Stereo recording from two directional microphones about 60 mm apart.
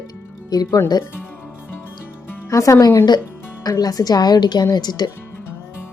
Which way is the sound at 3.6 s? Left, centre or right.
Left.